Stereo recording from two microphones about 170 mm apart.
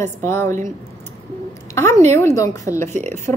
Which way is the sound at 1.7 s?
15° left (ahead or behind).